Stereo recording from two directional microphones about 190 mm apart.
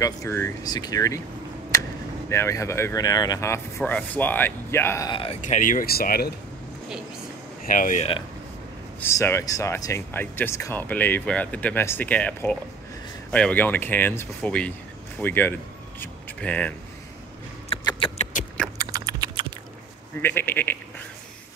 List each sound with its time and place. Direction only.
0.0 s speech: 15° left (ahead or behind)
5.1 s speech: 30° left (ahead or behind)
5.4 s speech: 45° left (ahead or behind)
7.6 s speech: 45° left (ahead or behind)
9.0 s speech: 15° left (ahead or behind)
16.0 s a sound: 5° left (ahead or behind)
17.6 s rodents: 30° left (ahead or behind)
18.8 s typing: 20° right (ahead or behind)
20.2 s speech: 10° left (ahead or behind)